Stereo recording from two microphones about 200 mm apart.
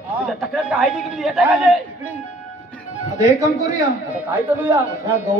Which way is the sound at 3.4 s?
15° right (ahead or behind).